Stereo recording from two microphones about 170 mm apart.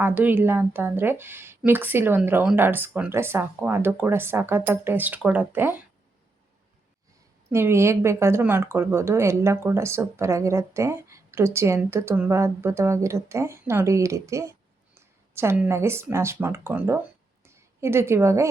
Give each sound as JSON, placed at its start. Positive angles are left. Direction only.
{"t": 0.0, "sound": "speech", "side_deg": -10}
{"t": 7.5, "sound": "speech", "side_deg": -15}